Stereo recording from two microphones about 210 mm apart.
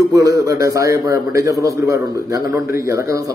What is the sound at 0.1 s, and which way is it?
A man's voice, 15° right (ahead or behind).